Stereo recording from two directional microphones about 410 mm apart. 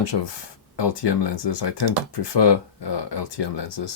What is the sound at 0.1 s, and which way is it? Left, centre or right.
Speech, left.